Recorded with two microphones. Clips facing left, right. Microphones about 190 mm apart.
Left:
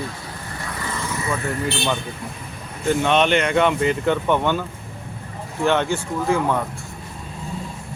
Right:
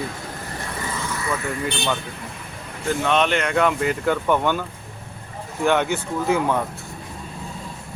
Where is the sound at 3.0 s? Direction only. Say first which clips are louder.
Left 1 dB; centre (ahead or behind).